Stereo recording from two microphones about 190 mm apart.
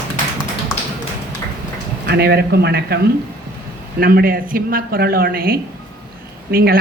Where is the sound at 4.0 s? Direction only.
50° right (ahead or behind).